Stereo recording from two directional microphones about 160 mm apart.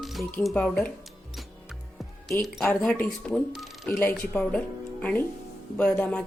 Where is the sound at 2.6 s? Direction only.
10° left (ahead or behind).